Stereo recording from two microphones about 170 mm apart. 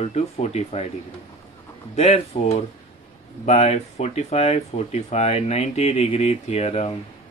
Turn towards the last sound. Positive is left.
turn(degrees=35)  # may be behind; listen again after turning